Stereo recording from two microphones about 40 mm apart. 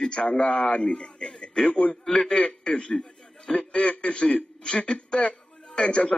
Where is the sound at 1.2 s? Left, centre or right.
Left.